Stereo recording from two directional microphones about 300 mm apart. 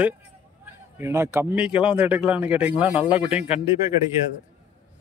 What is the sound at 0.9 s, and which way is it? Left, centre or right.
Speech, centre.